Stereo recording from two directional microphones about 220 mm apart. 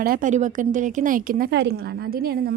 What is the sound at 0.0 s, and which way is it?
A woman's voice, 40° right (ahead or behind).